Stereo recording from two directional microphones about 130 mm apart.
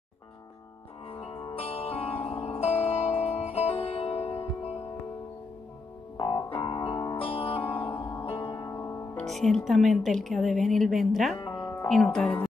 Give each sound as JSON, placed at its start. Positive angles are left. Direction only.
{"t": 1.1, "sound": "music", "side_deg": 45}
{"t": 6.1, "sound": "keyboard", "side_deg": 40}
{"t": 7.2, "sound": "music", "side_deg": 45}
{"t": 7.7, "sound": "music", "side_deg": 15}
{"t": 8.3, "sound": "music", "side_deg": 40}
{"t": 8.5, "sound": "music", "side_deg": 20}
{"t": 9.1, "sound": "speech", "side_deg": 5}
{"t": 11.3, "sound": "music", "side_deg": 35}
{"t": 11.9, "sound": "speech", "side_deg": 5}